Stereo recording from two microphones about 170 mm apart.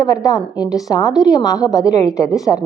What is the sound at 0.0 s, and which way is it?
A woman's voice, 20° left (ahead or behind).